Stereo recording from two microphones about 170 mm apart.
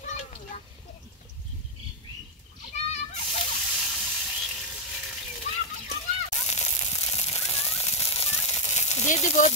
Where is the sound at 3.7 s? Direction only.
Centre (ahead or behind).